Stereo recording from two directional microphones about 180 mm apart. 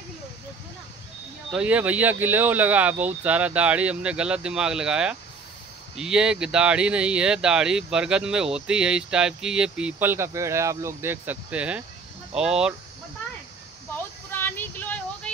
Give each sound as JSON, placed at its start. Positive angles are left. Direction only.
{"t": 1.5, "sound": "speech", "side_deg": -5}
{"t": 14.3, "sound": "child singing", "side_deg": 10}